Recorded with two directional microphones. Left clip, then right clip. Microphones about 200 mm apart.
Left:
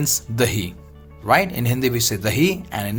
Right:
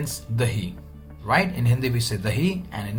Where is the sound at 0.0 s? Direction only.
50° left (ahead or behind).